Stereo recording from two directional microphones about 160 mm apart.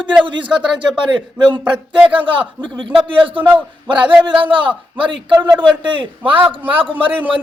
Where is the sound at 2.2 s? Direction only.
30° right (ahead or behind).